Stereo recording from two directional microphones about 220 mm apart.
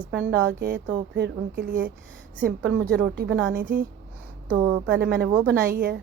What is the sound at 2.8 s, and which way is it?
Speech, 45° right (ahead or behind).